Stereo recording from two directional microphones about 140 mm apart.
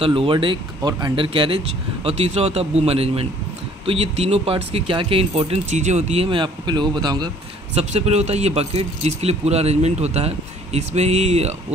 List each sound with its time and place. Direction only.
0.0 s speech: 40° right (ahead or behind)
7.7 s speech: 50° right (ahead or behind)